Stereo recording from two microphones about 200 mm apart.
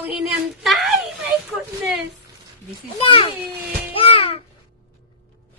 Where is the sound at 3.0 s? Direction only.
25° left (ahead or behind).